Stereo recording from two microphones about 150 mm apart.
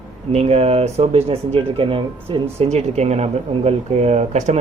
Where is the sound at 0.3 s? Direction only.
45° right (ahead or behind).